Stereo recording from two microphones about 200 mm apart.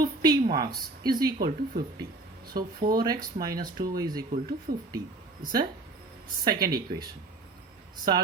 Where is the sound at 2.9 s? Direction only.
20° right (ahead or behind).